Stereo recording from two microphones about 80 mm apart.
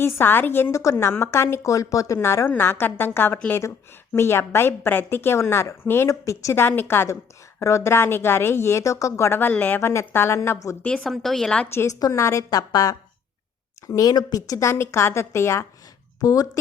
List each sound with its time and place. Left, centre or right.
0.0 s a woman's voice: left
6.1 s a woman's voice: left
9.5 s a woman's voice: left
10.8 s speech: centre
11.7 s a woman's voice: left
11.9 s a woman's voice: left
16.2 s a woman's voice: left